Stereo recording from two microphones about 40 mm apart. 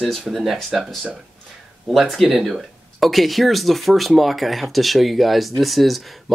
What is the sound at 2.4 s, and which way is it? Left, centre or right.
Speech, centre.